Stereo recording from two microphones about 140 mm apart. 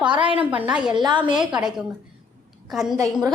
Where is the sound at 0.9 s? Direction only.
35° right (ahead or behind).